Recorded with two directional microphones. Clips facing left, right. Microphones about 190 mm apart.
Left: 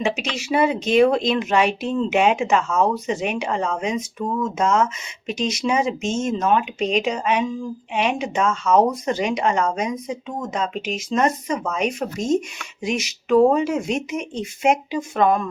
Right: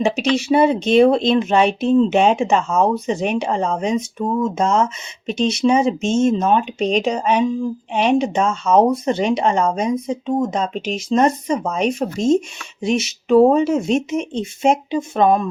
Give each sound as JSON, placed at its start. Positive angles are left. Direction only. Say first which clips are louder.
{"t": 0.0, "sound": "speech", "louder": "right 7 dB", "side_deg": -35}